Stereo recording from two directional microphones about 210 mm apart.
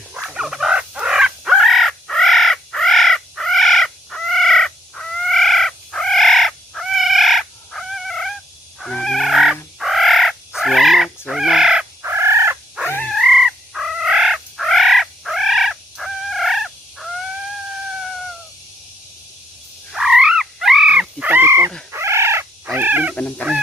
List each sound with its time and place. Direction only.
0.1 s bird: 5° right (ahead or behind)
8.8 s turkey: 5° left (ahead or behind)
11.3 s bird: centre (ahead or behind)
12.9 s cat: 5° left (ahead or behind)
19.9 s frog: centre (ahead or behind)
21.9 s cat: 10° right (ahead or behind)